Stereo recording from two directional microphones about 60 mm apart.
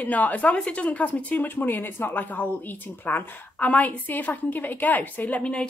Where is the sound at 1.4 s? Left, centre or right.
Left.